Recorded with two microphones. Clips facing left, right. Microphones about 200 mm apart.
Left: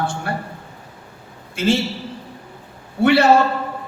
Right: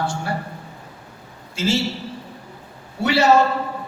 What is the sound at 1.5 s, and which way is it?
Speech, 55° left (ahead or behind).